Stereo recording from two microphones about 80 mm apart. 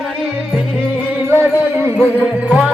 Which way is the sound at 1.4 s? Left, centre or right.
Right.